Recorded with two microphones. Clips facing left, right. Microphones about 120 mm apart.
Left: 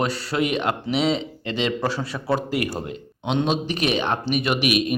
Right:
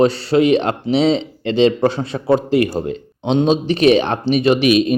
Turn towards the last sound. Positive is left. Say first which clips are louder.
# right 8 dB
turn(degrees=-30)  # may be behind; listen again after turning